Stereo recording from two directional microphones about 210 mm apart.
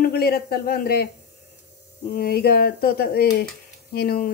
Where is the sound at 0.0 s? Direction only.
45° left (ahead or behind).